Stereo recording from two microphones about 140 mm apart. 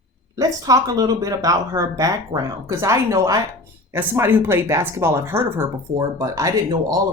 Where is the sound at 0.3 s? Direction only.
25° right (ahead or behind).